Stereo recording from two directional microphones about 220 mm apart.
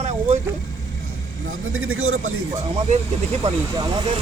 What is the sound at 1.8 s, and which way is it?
Speech, 75° right (ahead or behind).